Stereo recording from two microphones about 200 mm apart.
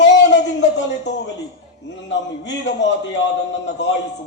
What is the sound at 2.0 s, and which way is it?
Speech, 65° left (ahead or behind).